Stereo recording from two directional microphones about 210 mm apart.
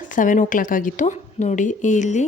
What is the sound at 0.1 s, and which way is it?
Speech, 40° left (ahead or behind).